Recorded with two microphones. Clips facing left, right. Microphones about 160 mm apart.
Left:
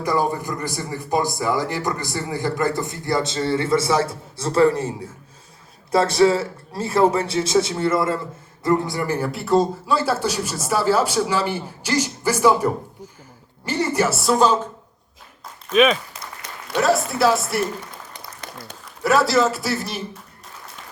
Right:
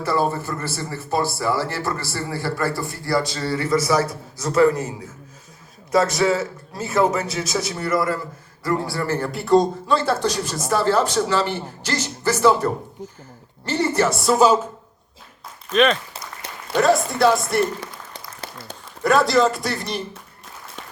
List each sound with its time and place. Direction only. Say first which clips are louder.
0.0 s a man's voice: even; 15° left (ahead or behind)
8.9 s speech: even; 15° left (ahead or behind)
9.3 s speech: right 3 dB; centre (ahead or behind)
15.7 s speech: left 1 dB; 5° left (ahead or behind)
18.1 s applause: right 1 dB; 30° right (ahead or behind)
19.0 s speech: right 1 dB; 5° left (ahead or behind)